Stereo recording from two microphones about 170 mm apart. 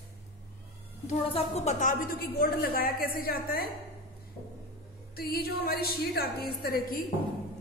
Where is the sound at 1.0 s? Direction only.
40° left (ahead or behind); by 3.7 s 60° left (ahead or behind).